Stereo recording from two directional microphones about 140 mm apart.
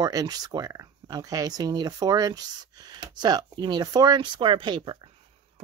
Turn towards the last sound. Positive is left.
turn(degrees=-35)  # may be behind; listen again after turning